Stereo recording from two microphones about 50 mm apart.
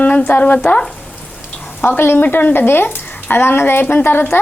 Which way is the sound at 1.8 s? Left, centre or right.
Left.